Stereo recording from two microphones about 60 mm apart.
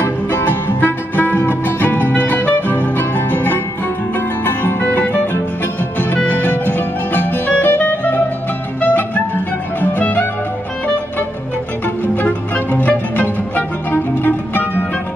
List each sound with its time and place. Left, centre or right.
0.0 s music: left
12.0 s music: left